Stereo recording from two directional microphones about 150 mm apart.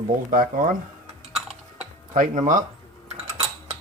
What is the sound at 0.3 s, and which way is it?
Speech, 65° right (ahead or behind).